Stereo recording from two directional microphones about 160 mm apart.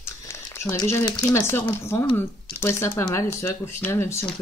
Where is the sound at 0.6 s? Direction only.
20° left (ahead or behind).